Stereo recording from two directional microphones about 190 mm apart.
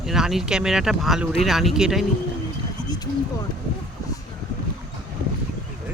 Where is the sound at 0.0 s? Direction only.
Centre (ahead or behind).